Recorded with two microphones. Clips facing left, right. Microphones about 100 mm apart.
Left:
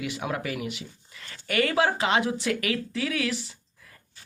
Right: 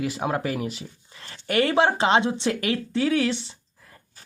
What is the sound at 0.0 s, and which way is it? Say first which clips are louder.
Speech: right 5 dB; 35° right (ahead or behind).